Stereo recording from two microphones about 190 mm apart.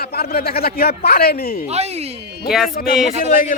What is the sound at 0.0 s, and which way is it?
A man's voice, 55° left (ahead or behind).